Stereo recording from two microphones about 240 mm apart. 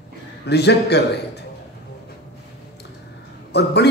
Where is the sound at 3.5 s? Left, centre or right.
Left.